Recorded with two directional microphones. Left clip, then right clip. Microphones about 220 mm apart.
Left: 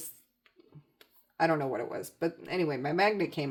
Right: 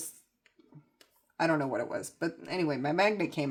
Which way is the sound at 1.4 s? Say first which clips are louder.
Left 1 dB; 35° right (ahead or behind).